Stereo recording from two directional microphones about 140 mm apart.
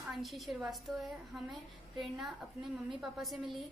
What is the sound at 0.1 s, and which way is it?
A woman's voice, centre (ahead or behind).